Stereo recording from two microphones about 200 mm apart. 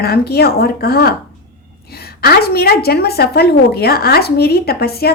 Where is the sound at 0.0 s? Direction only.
50° left (ahead or behind).